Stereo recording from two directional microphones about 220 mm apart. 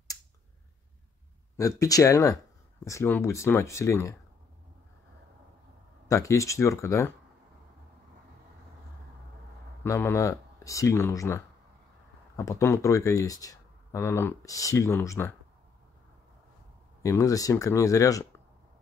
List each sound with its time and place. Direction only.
1.6 s speech: 15° left (ahead or behind)
6.0 s speech: 15° left (ahead or behind)
9.8 s speech: 10° left (ahead or behind)
17.0 s speech: 15° left (ahead or behind)